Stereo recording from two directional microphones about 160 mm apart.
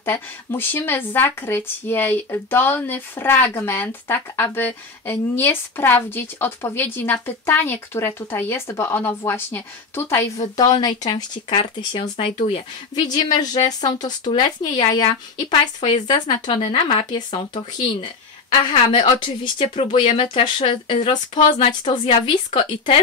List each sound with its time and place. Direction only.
0.0 s speech: 15° left (ahead or behind)
16.3 s speech: 25° left (ahead or behind)